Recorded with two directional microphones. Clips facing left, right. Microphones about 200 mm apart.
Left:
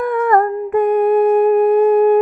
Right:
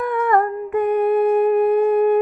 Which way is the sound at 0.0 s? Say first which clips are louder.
Left 4 dB; 45° left (ahead or behind).